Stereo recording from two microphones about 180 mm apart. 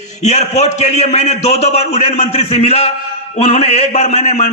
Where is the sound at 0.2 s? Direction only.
40° left (ahead or behind).